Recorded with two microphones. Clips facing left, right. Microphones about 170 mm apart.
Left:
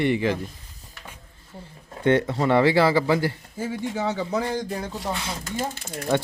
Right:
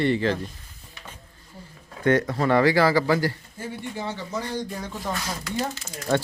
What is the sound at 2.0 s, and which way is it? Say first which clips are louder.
Speech: left 1 dB; 25° left (ahead or behind).